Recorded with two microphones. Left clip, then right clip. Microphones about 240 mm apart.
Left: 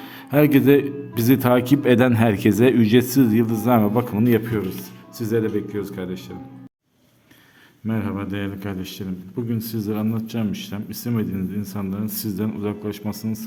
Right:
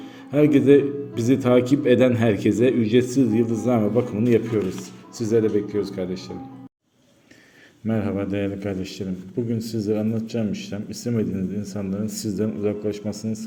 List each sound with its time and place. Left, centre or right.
0.0 s speech: left; by 6.3 s centre
7.9 s speech: centre